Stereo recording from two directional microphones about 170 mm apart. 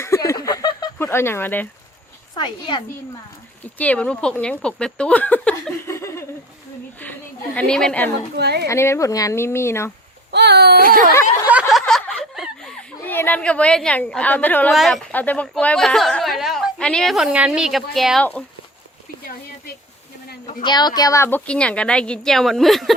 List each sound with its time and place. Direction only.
0.0 s a sound: 15° left (ahead or behind)
0.9 s speech: 15° left (ahead or behind)
2.3 s speech: 25° left (ahead or behind)
3.8 s speech: 10° left (ahead or behind)
7.0 s a sound: 10° left (ahead or behind)
7.7 s a woman's voice: 5° left (ahead or behind)
8.4 s speech: 75° right (ahead or behind)
8.6 s speech: 15° left (ahead or behind)
10.3 s speech: 75° right (ahead or behind); by 11.1 s 55° right (ahead or behind)
11.7 s snicker: centre (ahead or behind)
13.1 s a woman's voice: 10° left (ahead or behind)
20.7 s speech: 25° left (ahead or behind); by 23.0 s centre (ahead or behind)